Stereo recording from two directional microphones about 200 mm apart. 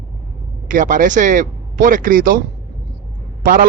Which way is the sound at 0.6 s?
40° right (ahead or behind).